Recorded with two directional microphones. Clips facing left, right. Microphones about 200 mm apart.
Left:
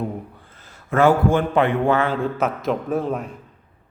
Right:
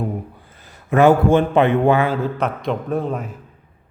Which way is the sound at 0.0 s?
10° right (ahead or behind).